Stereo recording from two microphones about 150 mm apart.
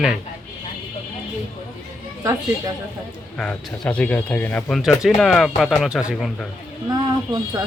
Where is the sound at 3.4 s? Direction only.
5° left (ahead or behind).